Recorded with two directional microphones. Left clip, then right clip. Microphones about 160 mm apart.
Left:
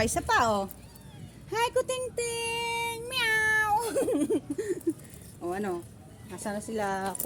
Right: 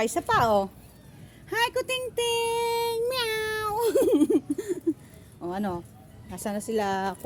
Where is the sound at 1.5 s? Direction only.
70° right (ahead or behind).